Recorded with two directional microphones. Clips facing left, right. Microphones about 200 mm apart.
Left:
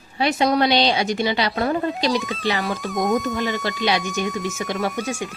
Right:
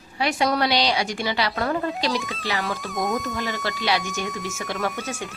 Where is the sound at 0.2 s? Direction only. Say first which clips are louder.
Left 4 dB; 25° left (ahead or behind).